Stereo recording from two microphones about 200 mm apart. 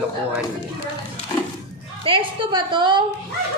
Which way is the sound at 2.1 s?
25° right (ahead or behind).